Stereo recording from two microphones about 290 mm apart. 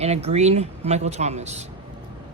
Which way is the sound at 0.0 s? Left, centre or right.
Right.